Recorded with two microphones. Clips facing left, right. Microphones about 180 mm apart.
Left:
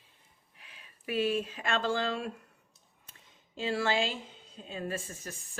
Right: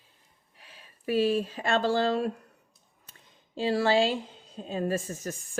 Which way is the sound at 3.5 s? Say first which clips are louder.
Right 6 dB; 35° right (ahead or behind).